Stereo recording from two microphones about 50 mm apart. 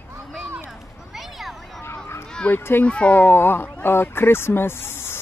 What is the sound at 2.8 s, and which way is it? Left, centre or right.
Speech, left.